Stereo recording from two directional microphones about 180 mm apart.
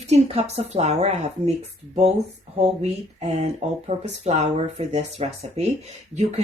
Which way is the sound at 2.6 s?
35° right (ahead or behind).